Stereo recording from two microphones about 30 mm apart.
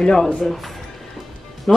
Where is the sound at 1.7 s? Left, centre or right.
Left.